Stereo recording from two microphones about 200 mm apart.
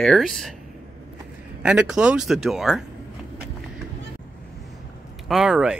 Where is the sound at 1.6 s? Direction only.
5° right (ahead or behind).